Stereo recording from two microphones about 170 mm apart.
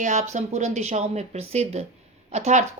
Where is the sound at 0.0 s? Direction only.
45° right (ahead or behind).